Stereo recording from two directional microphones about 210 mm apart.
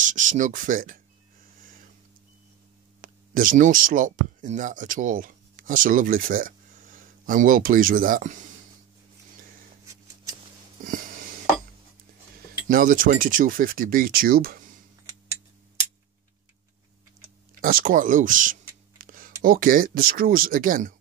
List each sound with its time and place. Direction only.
0.0 s speech: 35° right (ahead or behind)
3.0 s speech: 40° right (ahead or behind)
10.8 s a sound: 40° right (ahead or behind)
12.6 s speech: 40° right (ahead or behind)
17.6 s speech: 45° right (ahead or behind)
19.0 s a sound: 40° right (ahead or behind)
19.4 s speech: 40° right (ahead or behind)